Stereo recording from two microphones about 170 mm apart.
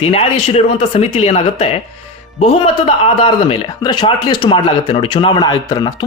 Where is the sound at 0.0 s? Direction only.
35° left (ahead or behind).